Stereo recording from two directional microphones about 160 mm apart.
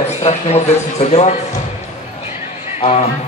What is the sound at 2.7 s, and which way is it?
Speech, 40° left (ahead or behind).